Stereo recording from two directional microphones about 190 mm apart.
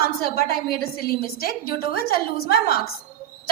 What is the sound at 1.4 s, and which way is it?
A woman's voice, 50° left (ahead or behind).